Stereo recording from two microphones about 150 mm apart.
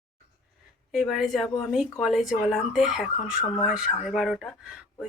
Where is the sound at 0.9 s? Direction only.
Centre (ahead or behind).